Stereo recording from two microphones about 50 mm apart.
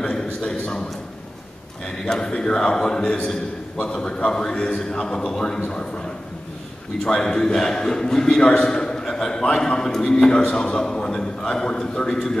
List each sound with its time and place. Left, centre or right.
0.1 s a sound: centre
2.0 s a man's voice: centre
7.1 s a man's voice: centre